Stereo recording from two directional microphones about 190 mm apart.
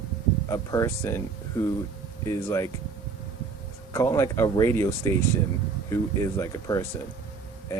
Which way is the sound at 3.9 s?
15° left (ahead or behind).